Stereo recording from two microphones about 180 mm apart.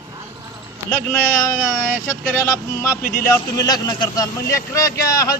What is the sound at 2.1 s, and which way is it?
Speech, 15° left (ahead or behind).